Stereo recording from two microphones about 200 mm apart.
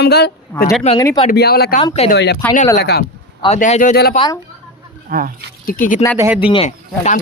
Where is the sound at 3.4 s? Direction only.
35° left (ahead or behind).